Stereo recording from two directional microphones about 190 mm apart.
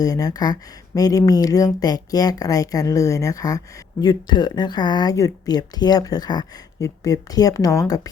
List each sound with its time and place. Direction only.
0.0 s speech: 20° left (ahead or behind)